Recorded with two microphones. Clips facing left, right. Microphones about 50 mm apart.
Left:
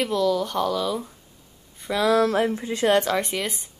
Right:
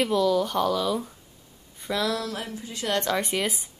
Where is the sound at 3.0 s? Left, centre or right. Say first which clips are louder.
Left 2 dB; centre.